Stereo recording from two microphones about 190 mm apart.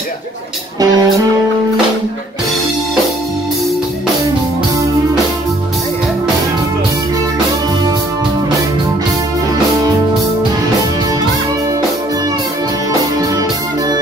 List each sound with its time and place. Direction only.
0.7 s music: 20° right (ahead or behind)